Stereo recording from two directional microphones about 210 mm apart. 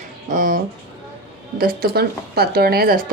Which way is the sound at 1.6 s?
50° right (ahead or behind).